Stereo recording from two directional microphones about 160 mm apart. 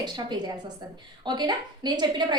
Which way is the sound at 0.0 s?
25° right (ahead or behind).